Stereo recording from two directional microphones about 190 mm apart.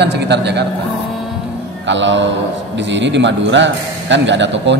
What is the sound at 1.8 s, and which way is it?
A man's voice, 70° right (ahead or behind).